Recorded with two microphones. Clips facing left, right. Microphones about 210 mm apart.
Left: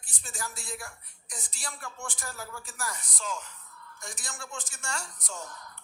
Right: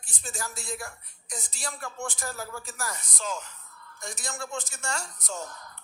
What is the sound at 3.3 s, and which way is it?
Music, 40° right (ahead or behind).